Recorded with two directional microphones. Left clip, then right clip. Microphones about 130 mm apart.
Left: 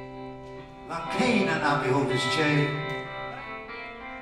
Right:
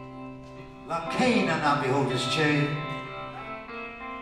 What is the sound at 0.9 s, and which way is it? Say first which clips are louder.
Music: right 1 dB; 15° right (ahead or behind).